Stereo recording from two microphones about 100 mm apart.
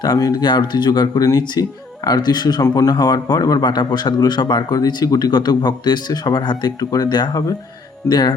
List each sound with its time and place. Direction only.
0.0 s a man's voice: 45° left (ahead or behind)